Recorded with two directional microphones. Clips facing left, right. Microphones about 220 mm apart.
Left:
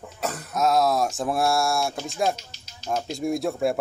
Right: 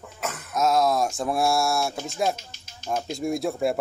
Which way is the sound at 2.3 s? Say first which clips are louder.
Even; 50° right (ahead or behind).